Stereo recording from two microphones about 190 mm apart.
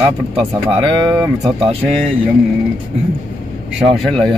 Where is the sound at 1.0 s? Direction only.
20° right (ahead or behind).